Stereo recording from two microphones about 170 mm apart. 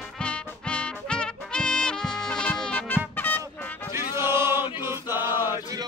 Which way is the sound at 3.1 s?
10° left (ahead or behind).